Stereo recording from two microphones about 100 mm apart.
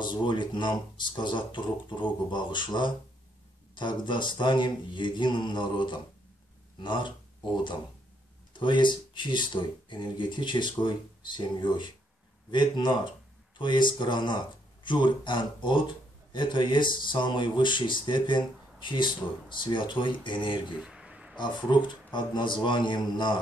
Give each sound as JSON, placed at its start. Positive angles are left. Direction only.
{"t": 0.0, "sound": "speech", "side_deg": 50}
{"t": 8.5, "sound": "speech", "side_deg": 50}
{"t": 20.7, "sound": "a sound", "side_deg": -10}
{"t": 21.4, "sound": "speech", "side_deg": 50}